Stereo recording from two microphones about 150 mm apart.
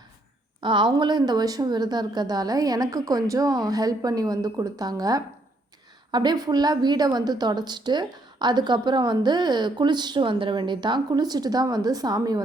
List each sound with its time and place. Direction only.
0.6 s a woman's voice: 30° right (ahead or behind)